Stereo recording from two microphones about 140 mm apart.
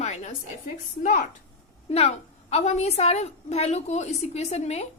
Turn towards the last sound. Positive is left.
turn(degrees=50)  # may be behind; listen again after turning